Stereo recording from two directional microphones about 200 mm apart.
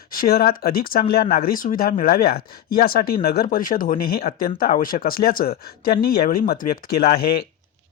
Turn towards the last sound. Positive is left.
turn(degrees=50)  # may be behind; listen again after turning